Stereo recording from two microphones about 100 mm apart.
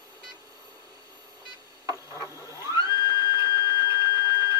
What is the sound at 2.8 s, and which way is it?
Printer, 40° left (ahead or behind).